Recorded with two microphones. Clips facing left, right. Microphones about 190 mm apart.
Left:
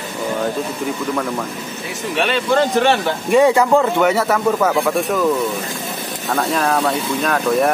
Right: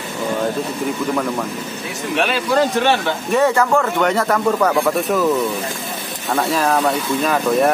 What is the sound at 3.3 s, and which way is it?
Speech, 15° left (ahead or behind).